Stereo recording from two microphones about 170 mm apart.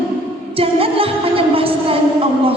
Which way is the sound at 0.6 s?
35° right (ahead or behind).